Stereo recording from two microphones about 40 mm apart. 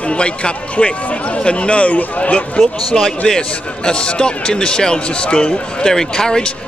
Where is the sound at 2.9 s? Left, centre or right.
Centre.